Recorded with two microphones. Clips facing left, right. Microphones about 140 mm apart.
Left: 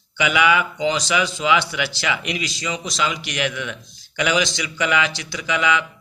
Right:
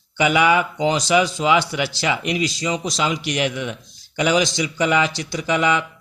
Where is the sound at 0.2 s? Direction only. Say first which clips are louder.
Right 2 dB; 35° right (ahead or behind).